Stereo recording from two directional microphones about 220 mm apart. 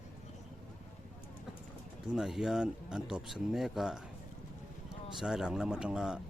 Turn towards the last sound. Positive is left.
turn(degrees=-5)  # may be behind; listen again after turning